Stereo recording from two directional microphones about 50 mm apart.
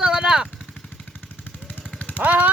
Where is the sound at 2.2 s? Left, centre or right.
Right.